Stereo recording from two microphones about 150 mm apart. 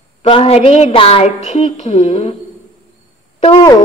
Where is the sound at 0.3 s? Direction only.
45° left (ahead or behind).